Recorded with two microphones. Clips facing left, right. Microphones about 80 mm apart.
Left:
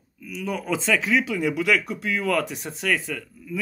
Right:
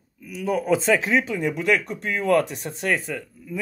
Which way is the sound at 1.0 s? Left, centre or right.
Right.